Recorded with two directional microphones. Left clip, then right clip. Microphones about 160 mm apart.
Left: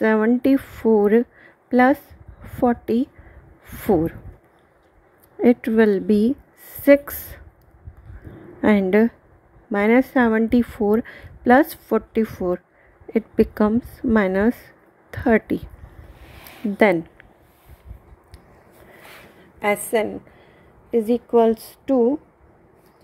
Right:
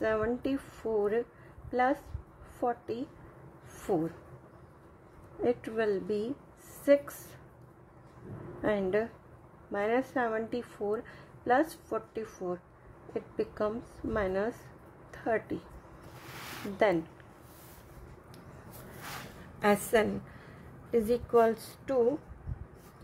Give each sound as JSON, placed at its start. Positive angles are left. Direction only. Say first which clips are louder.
{"t": 0.0, "sound": "a woman's voice", "louder": "left 12 dB", "side_deg": 50}
{"t": 5.4, "sound": "a woman's voice", "louder": "left 13 dB", "side_deg": 55}
{"t": 8.6, "sound": "a woman's voice", "louder": "left 12 dB", "side_deg": 55}
{"t": 16.7, "sound": "a woman's voice", "louder": "left 10 dB", "side_deg": 50}
{"t": 19.6, "sound": "a woman's voice", "louder": "left 6 dB", "side_deg": 25}